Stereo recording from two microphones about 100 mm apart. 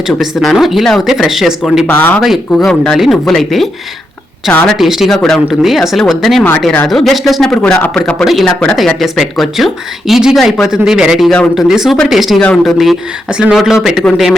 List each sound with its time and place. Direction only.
0.1 s speech: centre (ahead or behind)
1.9 s speech: 20° left (ahead or behind)
2.2 s speech: centre (ahead or behind)
8.2 s speech: centre (ahead or behind)
12.4 s speech: 10° left (ahead or behind)
12.7 s speech: 5° right (ahead or behind)